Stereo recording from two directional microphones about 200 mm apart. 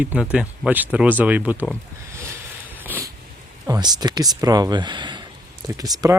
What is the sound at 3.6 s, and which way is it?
Speech, 20° right (ahead or behind).